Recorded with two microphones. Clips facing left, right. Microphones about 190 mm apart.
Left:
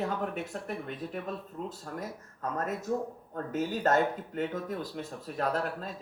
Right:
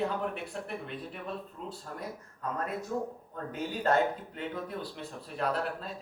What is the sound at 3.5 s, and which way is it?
Speech, 45° left (ahead or behind).